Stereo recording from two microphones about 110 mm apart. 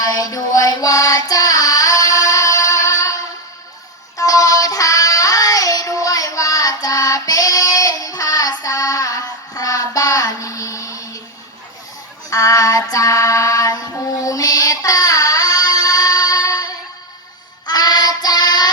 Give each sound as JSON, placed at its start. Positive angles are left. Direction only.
{"t": 0.0, "sound": "music", "side_deg": 35}
{"t": 4.2, "sound": "child singing", "side_deg": 30}
{"t": 12.3, "sound": "female singing", "side_deg": 30}
{"t": 17.7, "sound": "child singing", "side_deg": 35}